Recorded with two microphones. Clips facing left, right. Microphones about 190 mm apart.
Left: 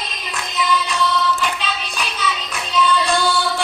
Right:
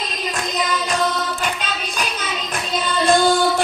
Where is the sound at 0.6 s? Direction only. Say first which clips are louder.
Left 2 dB; 40° right (ahead or behind).